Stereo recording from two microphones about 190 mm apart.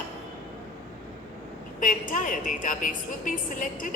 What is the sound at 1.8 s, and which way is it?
A woman's voice, 45° left (ahead or behind).